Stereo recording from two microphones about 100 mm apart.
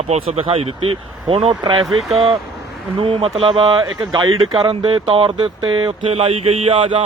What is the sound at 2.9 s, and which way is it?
Speech, 70° right (ahead or behind).